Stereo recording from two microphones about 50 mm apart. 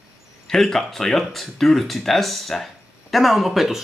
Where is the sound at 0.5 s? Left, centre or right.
Centre.